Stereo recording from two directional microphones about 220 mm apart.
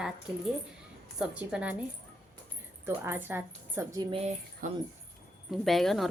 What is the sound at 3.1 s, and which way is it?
Speech, 10° right (ahead or behind).